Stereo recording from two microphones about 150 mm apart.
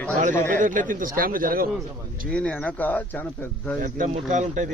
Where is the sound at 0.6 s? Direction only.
60° right (ahead or behind).